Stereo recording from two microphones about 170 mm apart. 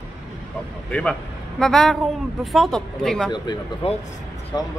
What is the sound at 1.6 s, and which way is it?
Speech, centre (ahead or behind).